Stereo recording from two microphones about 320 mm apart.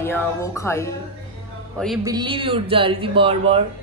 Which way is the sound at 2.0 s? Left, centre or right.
Centre.